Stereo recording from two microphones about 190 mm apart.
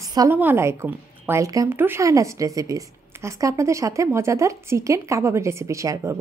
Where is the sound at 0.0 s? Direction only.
20° right (ahead or behind).